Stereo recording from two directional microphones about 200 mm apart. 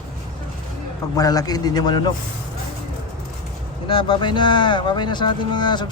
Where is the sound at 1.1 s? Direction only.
20° left (ahead or behind).